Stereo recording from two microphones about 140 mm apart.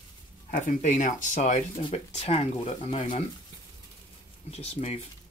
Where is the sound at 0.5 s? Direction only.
65° left (ahead or behind).